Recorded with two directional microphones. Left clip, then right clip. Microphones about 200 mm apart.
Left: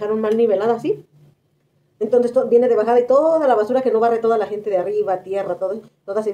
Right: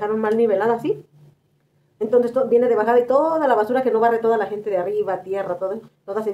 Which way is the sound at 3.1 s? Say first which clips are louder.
Left 3 dB; 15° right (ahead or behind).